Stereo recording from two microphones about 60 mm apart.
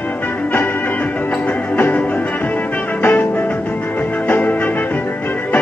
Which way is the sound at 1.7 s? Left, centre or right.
Left.